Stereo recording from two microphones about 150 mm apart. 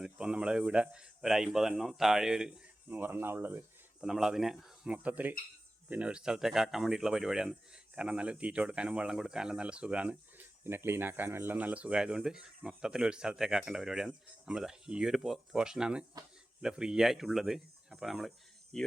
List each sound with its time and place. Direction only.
0.0 s speech: 5° right (ahead or behind)
4.0 s speech: 5° right (ahead or behind)